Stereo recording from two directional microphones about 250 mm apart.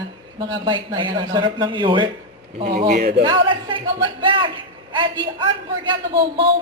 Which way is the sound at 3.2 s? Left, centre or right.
Centre.